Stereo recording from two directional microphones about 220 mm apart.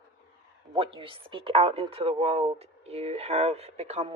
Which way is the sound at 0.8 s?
25° right (ahead or behind).